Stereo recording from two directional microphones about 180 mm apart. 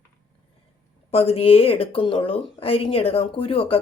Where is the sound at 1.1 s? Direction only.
35° left (ahead or behind).